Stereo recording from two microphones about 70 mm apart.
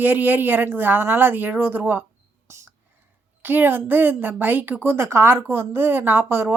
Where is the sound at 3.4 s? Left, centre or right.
Right.